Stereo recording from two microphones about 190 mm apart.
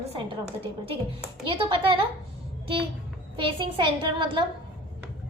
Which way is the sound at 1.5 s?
30° right (ahead or behind).